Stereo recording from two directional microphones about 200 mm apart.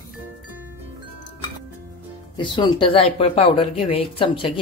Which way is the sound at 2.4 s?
25° left (ahead or behind).